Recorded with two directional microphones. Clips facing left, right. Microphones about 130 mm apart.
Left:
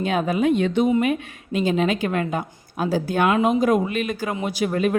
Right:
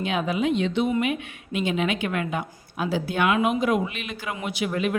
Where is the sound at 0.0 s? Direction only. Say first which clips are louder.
Left 4 dB; 40° left (ahead or behind).